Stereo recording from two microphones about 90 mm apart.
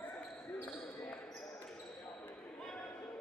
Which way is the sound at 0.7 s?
Centre (ahead or behind).